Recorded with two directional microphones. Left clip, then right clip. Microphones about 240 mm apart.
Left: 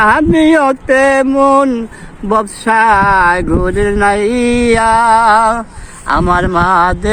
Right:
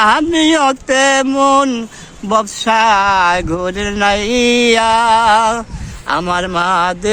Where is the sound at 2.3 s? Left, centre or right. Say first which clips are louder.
Left 1 dB; right.